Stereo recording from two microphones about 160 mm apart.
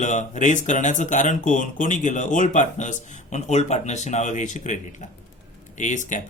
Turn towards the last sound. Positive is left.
turn(degrees=50)  # may be behind; listen again after turning